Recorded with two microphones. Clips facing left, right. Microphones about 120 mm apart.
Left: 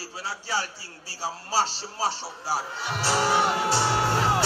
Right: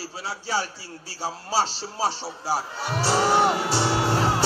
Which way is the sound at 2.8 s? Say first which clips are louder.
Right 3 dB; 40° right (ahead or behind).